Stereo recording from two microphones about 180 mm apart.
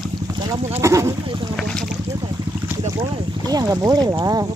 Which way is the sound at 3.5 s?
20° right (ahead or behind).